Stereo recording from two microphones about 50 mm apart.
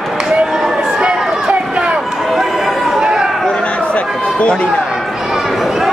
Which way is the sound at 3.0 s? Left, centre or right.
Centre.